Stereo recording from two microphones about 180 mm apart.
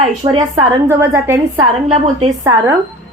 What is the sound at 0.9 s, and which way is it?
Speech, 15° right (ahead or behind).